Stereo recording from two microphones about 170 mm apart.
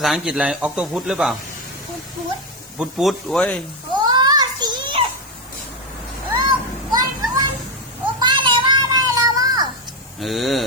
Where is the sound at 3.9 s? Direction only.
25° right (ahead or behind).